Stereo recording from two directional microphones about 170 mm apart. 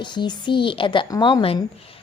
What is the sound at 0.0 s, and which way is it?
A woman's voice, 25° left (ahead or behind).